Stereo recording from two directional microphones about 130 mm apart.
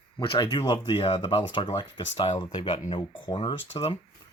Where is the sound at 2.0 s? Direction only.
55° left (ahead or behind).